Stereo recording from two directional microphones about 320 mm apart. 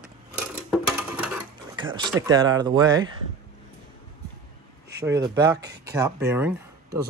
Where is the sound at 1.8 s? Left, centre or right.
Centre.